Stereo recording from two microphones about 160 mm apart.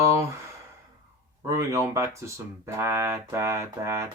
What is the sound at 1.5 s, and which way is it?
Speech, 20° right (ahead or behind).